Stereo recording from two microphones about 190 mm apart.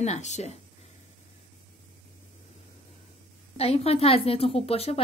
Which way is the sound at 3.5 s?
30° left (ahead or behind).